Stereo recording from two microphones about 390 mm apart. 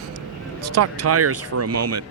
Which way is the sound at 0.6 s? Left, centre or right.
Right.